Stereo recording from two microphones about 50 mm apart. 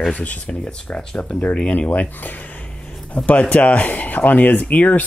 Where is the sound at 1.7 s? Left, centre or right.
Left.